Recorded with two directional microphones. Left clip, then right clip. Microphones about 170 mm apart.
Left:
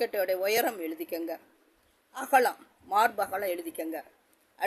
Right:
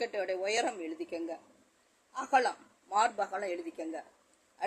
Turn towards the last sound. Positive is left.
turn(degrees=85)